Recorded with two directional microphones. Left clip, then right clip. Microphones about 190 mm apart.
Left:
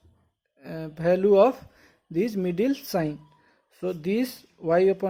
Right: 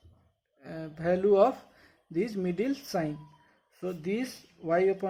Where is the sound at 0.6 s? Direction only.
35° left (ahead or behind).